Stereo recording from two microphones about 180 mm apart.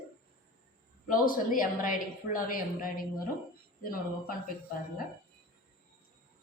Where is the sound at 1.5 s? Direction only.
50° left (ahead or behind).